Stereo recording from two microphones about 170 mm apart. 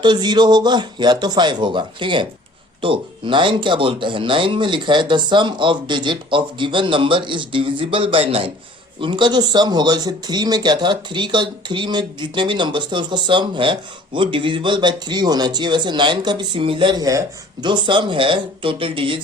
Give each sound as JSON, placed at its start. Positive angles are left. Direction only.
{"t": 0.0, "sound": "speech", "side_deg": -25}